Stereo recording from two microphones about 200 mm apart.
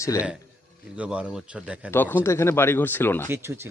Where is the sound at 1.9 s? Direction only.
10° left (ahead or behind).